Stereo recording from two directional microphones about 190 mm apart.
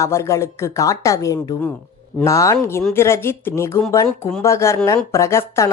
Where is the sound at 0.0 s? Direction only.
15° left (ahead or behind).